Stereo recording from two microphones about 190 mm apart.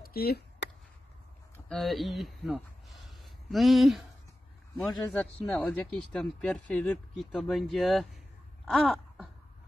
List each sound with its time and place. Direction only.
0.0 s chop: 55° left (ahead or behind)
1.7 s speech: centre (ahead or behind)
8.6 s a sound: centre (ahead or behind)